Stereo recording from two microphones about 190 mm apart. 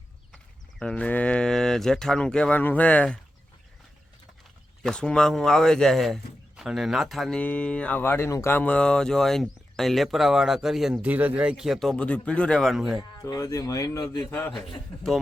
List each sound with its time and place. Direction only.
0.8 s speech: 5° left (ahead or behind)
4.8 s speech: 5° left (ahead or behind)
13.1 s speech: 15° left (ahead or behind)
14.3 s speech: 5° left (ahead or behind)